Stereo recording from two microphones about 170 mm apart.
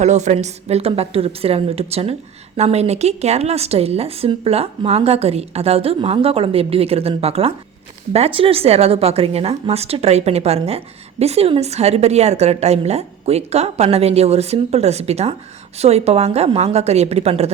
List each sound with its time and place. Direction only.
0.0 s a woman's voice: 40° right (ahead or behind)